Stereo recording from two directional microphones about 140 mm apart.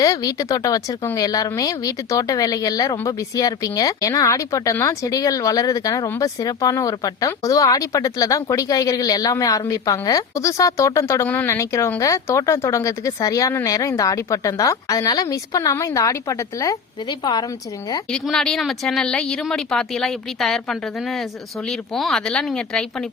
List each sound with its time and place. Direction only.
0.0 s speech: 25° left (ahead or behind)
18.1 s speech: 5° left (ahead or behind)